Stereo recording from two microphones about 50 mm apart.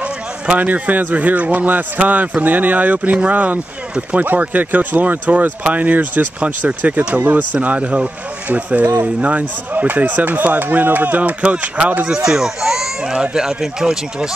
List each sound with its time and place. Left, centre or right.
0.5 s speech: right
7.2 s speech: right
7.6 s speech: right
12.3 s speech: centre